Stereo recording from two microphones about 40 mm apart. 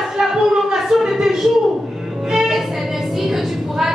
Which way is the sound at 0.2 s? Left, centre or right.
Centre.